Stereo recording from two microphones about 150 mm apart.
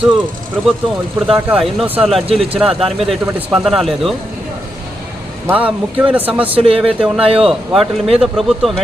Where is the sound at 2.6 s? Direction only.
40° right (ahead or behind).